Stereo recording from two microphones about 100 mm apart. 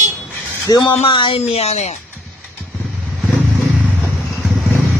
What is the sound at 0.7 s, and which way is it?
Speech, 40° left (ahead or behind).